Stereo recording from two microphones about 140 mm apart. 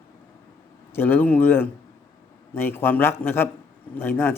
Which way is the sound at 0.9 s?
15° left (ahead or behind).